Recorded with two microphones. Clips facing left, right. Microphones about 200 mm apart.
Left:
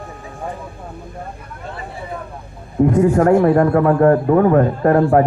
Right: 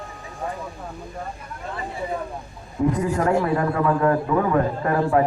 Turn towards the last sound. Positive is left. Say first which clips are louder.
# left 7 dB
turn(degrees=50)  # may be behind; listen again after turning